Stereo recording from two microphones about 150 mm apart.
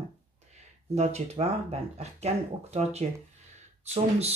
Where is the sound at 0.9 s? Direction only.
45° right (ahead or behind).